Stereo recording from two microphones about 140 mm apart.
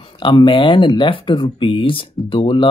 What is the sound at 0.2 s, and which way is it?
Speech, 35° left (ahead or behind).